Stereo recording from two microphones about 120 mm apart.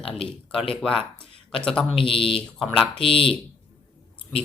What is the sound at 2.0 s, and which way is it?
Speech, 50° left (ahead or behind).